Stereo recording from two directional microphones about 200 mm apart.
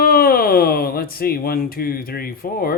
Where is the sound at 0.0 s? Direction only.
50° left (ahead or behind).